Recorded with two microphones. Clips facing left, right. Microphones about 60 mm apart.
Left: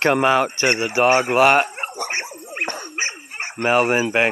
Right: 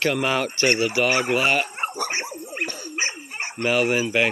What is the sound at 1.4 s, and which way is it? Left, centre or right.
Speech, left.